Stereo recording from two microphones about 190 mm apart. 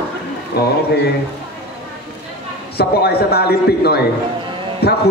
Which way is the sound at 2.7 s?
55° left (ahead or behind).